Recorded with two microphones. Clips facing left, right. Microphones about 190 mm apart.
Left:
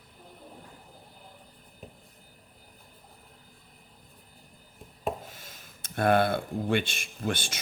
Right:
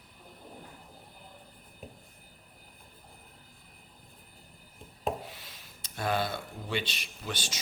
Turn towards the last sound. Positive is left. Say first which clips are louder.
# left 7 dB
turn(degrees=55)  # may be behind; listen again after turning